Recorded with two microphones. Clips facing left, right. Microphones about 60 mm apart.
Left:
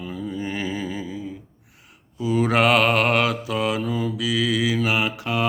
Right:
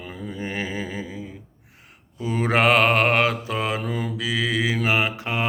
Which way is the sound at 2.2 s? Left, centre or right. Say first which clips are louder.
Left 1 dB; right.